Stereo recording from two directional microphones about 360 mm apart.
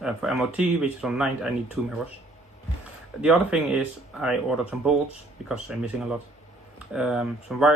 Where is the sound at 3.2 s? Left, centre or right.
Centre.